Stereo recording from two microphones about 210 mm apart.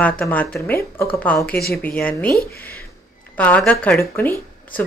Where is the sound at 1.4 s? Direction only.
45° left (ahead or behind).